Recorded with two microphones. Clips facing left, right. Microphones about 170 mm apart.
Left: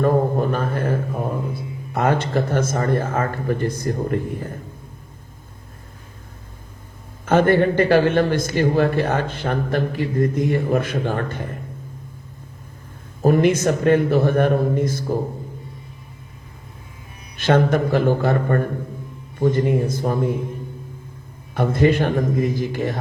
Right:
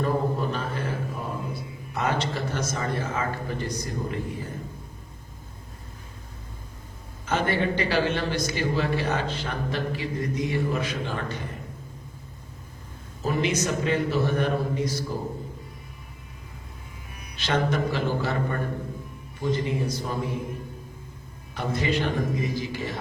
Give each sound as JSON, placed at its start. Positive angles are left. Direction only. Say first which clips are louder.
{"t": 0.0, "sound": "a sound", "louder": "left 7 dB", "side_deg": 50}
{"t": 7.3, "sound": "a man's voice", "louder": "left 9 dB", "side_deg": 50}
{"t": 13.2, "sound": "a man's voice", "louder": "left 9 dB", "side_deg": 50}
{"t": 17.3, "sound": "a man's voice", "louder": "left 8 dB", "side_deg": 55}
{"t": 21.5, "sound": "a man's voice", "louder": "left 9 dB", "side_deg": 55}